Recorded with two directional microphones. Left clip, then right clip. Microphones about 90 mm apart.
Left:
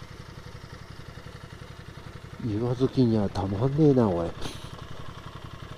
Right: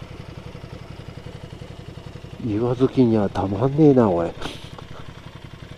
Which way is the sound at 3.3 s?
15° left (ahead or behind).